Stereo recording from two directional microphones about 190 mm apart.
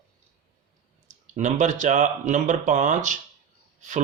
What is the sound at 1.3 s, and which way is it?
Speech, 40° right (ahead or behind).